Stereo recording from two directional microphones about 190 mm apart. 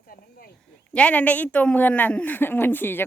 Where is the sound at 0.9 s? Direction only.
5° left (ahead or behind).